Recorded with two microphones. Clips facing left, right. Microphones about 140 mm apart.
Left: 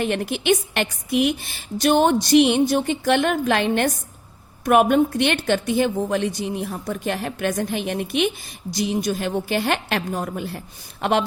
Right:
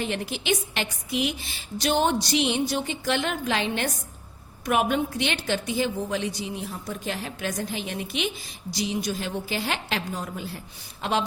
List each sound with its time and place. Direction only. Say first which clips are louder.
0.0 s a woman's voice: left 7 dB; 60° left (ahead or behind)